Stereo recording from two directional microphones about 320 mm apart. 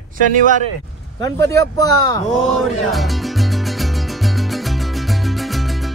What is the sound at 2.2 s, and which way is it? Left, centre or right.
Speech, left.